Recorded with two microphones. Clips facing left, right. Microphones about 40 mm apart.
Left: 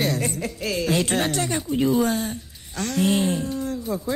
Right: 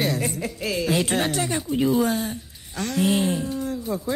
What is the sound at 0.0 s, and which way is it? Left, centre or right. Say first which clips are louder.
Speech: even; centre.